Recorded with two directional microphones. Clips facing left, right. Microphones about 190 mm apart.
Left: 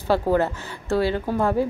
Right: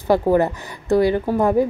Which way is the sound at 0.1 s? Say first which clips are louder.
Right 4 dB; 15° right (ahead or behind).